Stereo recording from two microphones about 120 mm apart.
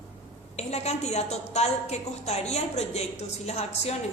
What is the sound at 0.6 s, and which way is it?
A woman's voice, 65° left (ahead or behind).